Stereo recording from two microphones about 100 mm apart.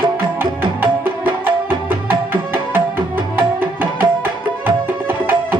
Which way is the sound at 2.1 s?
20° right (ahead or behind).